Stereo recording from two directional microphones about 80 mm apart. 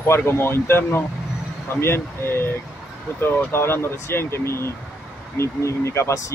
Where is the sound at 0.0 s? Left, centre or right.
Left.